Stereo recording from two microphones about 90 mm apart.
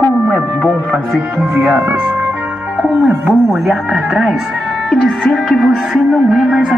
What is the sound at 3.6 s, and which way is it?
Music, 10° right (ahead or behind).